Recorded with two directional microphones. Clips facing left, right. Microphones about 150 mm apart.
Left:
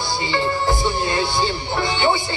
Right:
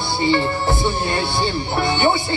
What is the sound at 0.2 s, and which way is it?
Speech, 20° left (ahead or behind).